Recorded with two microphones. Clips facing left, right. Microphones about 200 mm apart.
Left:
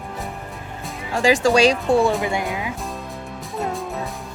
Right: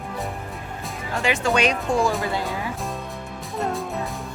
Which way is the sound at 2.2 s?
15° left (ahead or behind).